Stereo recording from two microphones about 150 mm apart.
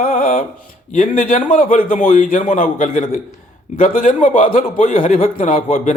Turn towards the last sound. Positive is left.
turn(degrees=60)  # may be behind; listen again after turning